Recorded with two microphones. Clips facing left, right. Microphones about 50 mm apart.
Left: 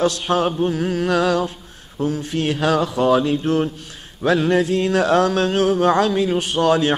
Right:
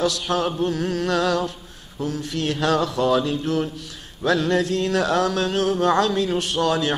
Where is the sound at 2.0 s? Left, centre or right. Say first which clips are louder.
Left 5 dB; centre.